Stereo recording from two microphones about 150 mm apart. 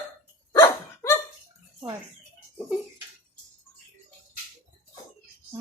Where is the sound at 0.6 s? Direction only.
20° left (ahead or behind).